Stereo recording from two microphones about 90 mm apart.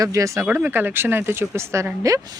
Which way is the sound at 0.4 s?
20° right (ahead or behind).